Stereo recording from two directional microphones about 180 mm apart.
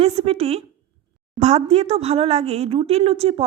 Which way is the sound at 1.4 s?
35° right (ahead or behind).